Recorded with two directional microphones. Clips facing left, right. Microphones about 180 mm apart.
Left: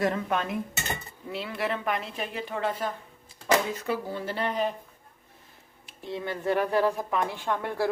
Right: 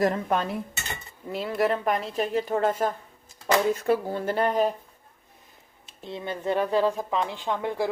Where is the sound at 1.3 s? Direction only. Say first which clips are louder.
Right 6 dB; 45° right (ahead or behind).